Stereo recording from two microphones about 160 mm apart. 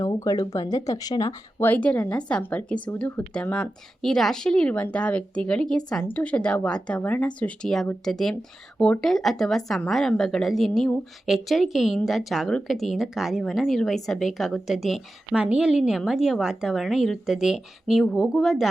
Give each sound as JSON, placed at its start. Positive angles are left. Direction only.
{"t": 0.0, "sound": "speech", "side_deg": 25}